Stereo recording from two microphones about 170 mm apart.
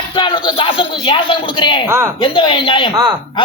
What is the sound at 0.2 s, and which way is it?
Speech, 30° left (ahead or behind).